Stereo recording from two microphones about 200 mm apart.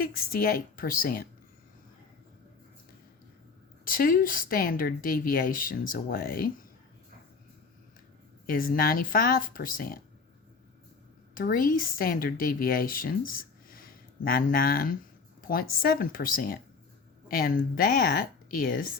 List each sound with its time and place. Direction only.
0.0 s speech: 45° left (ahead or behind)
3.8 s speech: 45° left (ahead or behind)
8.4 s speech: 45° left (ahead or behind)
11.3 s speech: 45° left (ahead or behind)